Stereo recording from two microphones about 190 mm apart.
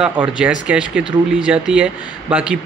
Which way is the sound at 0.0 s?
5° right (ahead or behind).